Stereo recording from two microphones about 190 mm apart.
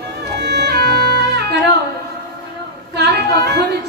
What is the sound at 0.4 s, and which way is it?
Music, 65° right (ahead or behind).